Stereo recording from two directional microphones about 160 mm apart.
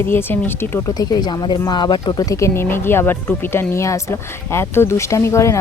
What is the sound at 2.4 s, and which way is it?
A woman's voice, 15° left (ahead or behind).